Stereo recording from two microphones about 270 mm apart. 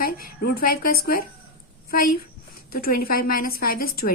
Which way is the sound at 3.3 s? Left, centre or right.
Left.